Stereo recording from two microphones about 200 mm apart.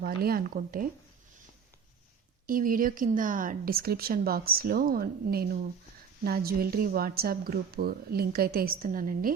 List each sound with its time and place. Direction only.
0.0 s a woman's voice: 50° right (ahead or behind)
2.5 s a woman's voice: 45° right (ahead or behind)